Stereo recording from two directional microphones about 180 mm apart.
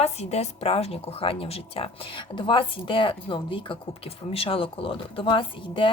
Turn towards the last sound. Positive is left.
turn(degrees=30)  # may be behind; listen again after turning